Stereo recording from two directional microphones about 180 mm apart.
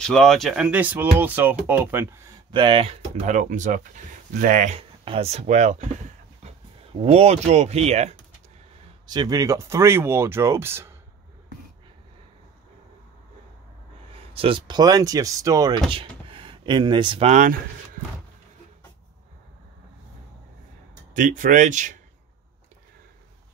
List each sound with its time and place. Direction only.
0.0 s speech: 5° left (ahead or behind)
2.5 s speech: 30° right (ahead or behind)
3.3 s speech: 45° right (ahead or behind)
4.7 s speech: 35° right (ahead or behind)
9.0 s speech: 25° right (ahead or behind)
14.3 s speech: 30° right (ahead or behind)
21.1 s speech: 45° right (ahead or behind)